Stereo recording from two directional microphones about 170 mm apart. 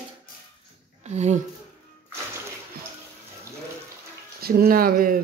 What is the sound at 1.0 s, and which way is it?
Speech, 40° right (ahead or behind).